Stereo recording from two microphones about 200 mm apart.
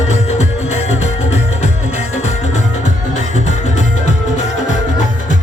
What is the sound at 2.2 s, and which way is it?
Music, 35° left (ahead or behind).